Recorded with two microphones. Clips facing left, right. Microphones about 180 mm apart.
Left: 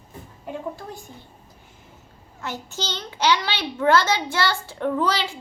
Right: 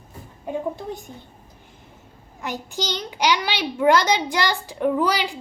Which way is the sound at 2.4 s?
15° right (ahead or behind).